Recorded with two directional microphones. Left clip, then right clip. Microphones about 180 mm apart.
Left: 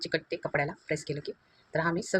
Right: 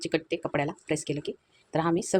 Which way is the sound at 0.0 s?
50° right (ahead or behind).